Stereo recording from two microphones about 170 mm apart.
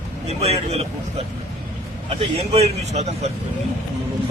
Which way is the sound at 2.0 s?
35° right (ahead or behind).